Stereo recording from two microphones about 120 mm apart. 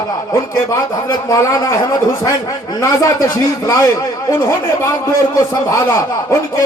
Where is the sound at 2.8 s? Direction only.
30° left (ahead or behind).